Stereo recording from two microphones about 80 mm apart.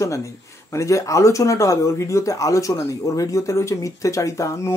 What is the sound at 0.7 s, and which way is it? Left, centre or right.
Speech, left.